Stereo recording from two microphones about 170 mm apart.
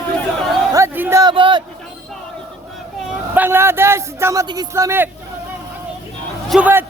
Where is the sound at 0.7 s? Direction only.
15° right (ahead or behind).